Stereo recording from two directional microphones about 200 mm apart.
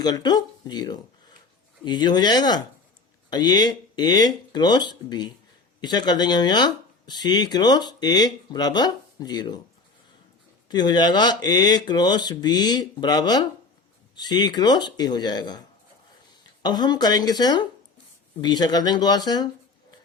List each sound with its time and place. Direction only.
0.0 s speech: 20° left (ahead or behind)
10.7 s speech: 20° left (ahead or behind)
16.6 s speech: 20° left (ahead or behind)